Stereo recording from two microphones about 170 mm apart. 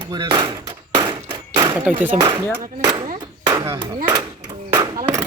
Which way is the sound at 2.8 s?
25° right (ahead or behind).